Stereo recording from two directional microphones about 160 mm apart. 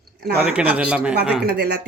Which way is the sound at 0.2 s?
80° right.